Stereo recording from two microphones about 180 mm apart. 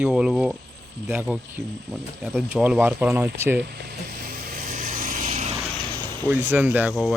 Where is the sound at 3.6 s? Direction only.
60° right (ahead or behind).